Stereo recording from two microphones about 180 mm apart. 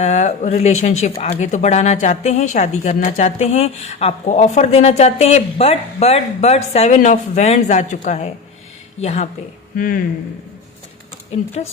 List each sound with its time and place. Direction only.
0.0 s speech: 40° left (ahead or behind)
9.7 s speech: 50° left (ahead or behind)
11.3 s speech: 35° left (ahead or behind)